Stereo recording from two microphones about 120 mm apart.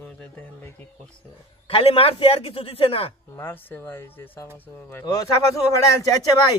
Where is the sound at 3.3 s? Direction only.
15° left (ahead or behind).